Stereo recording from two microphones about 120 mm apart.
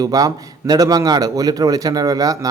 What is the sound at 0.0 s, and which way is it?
A man's voice, 30° right (ahead or behind).